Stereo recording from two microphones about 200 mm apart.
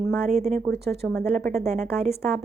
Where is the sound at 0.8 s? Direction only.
55° right (ahead or behind).